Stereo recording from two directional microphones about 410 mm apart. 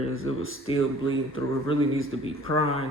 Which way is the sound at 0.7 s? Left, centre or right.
Centre.